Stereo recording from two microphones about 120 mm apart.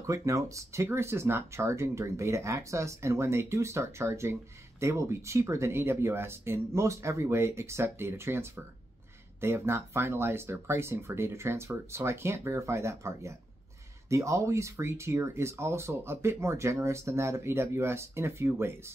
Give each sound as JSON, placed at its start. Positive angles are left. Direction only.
{"t": 0.0, "sound": "speech", "side_deg": -25}